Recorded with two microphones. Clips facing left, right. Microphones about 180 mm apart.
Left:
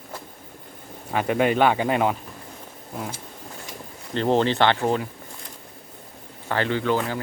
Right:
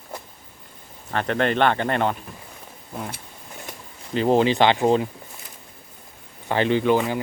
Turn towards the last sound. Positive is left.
turn(degrees=-15)  # may be behind; listen again after turning